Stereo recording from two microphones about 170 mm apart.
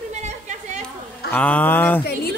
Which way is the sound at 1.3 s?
10° left (ahead or behind).